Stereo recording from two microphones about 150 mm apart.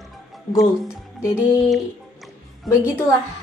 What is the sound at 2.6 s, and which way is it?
Speech, 20° left (ahead or behind).